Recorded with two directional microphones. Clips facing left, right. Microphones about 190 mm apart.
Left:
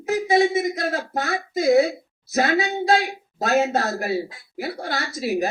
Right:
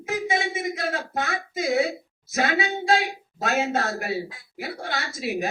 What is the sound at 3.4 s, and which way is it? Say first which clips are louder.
Speech: left 4 dB; 35° left (ahead or behind).